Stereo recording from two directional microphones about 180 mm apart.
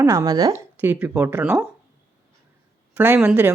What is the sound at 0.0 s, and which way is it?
Speech, 20° right (ahead or behind).